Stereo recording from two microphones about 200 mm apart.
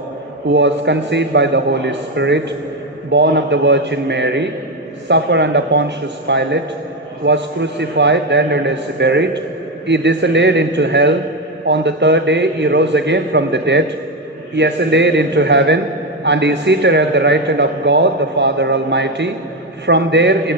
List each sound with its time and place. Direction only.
0.5 s a man's voice: 60° right (ahead or behind)